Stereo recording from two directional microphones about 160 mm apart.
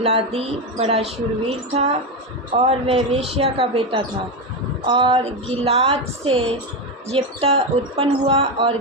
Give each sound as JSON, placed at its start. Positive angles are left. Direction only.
{"t": 0.0, "sound": "a woman's voice", "side_deg": -40}